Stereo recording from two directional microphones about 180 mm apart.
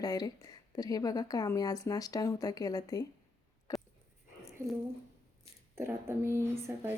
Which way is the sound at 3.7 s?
20° left (ahead or behind).